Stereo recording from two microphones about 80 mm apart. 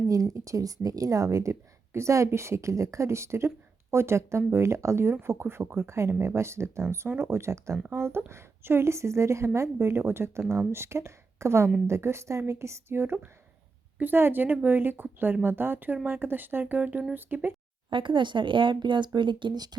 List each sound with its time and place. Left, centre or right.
0.1 s a woman's voice: right
17.9 s speech: right